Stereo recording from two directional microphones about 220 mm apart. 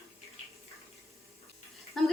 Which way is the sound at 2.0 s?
Centre (ahead or behind).